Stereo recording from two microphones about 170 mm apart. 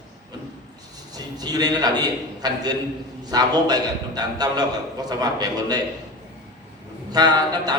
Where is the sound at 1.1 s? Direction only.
25° right (ahead or behind).